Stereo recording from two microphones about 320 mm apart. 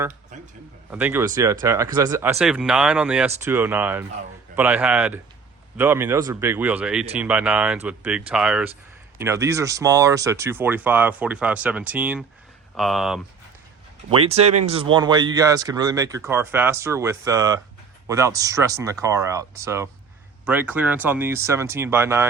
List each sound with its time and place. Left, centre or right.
0.9 s a man's voice: centre
14.1 s speech: centre